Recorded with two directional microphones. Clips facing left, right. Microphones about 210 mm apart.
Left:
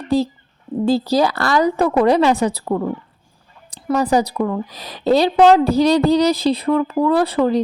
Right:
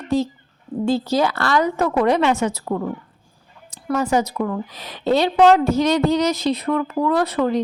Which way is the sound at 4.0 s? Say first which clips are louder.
Left 3 dB; 35° left (ahead or behind).